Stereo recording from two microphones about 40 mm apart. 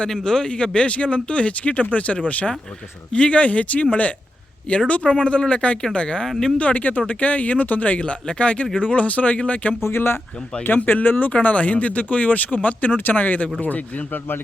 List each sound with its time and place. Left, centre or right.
0.1 s speech: centre; by 9.4 s left
9.8 s speech: left
10.8 s speech: left
11.3 s speech: left
14.1 s speech: left